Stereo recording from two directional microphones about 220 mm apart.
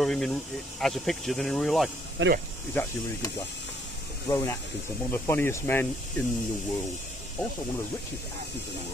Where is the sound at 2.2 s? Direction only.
55° right (ahead or behind).